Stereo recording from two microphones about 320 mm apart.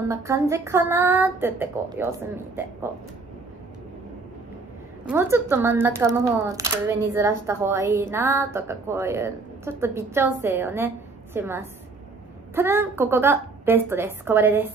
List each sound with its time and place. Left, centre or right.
0.1 s a woman's voice: centre
5.0 s a woman's voice: centre